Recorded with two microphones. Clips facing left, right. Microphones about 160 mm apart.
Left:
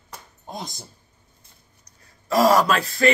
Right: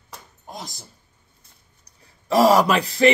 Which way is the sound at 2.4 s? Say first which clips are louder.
Right 2 dB; 10° right (ahead or behind).